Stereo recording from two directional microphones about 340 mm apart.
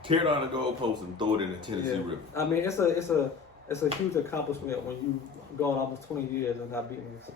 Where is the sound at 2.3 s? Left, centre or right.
Centre.